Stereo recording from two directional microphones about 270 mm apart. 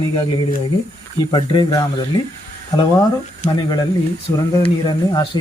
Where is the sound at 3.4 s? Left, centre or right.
Centre.